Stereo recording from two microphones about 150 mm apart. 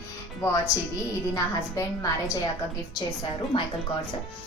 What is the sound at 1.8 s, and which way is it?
Speech, 25° left (ahead or behind).